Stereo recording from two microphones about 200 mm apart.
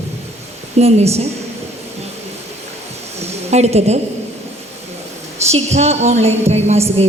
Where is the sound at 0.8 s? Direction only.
30° right (ahead or behind).